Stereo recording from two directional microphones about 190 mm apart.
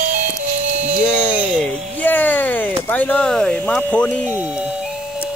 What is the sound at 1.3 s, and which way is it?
Speech, 5° right (ahead or behind).